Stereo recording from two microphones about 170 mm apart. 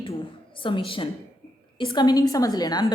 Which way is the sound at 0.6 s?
30° left (ahead or behind).